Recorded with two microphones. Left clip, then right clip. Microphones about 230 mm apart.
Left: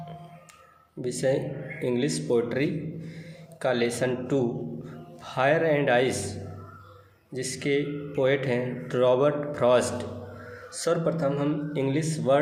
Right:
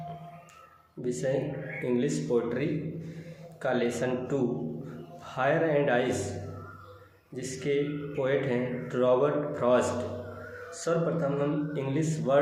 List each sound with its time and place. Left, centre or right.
1.0 s a man's voice: left
7.3 s a man's voice: left